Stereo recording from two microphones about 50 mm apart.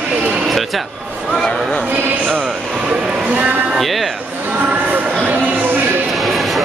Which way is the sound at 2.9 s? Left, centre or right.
Centre.